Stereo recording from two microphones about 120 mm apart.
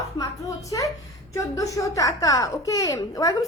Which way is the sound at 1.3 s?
25° left (ahead or behind).